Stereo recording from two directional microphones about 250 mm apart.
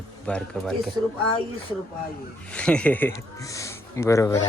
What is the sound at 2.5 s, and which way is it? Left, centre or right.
Speech, centre.